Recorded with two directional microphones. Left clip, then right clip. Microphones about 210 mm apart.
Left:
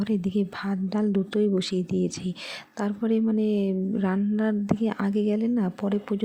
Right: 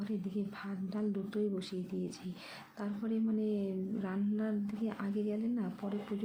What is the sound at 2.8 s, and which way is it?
A woman's voice, 35° left (ahead or behind).